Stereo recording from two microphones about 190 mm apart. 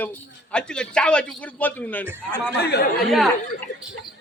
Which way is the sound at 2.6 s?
60° left (ahead or behind).